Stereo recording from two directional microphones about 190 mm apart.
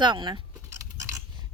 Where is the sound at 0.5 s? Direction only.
15° right (ahead or behind).